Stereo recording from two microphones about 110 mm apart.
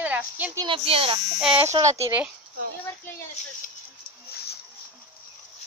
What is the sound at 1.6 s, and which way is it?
Speech, 30° right (ahead or behind).